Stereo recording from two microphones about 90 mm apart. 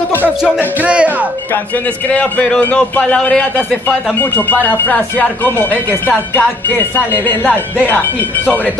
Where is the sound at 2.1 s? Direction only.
15° left (ahead or behind).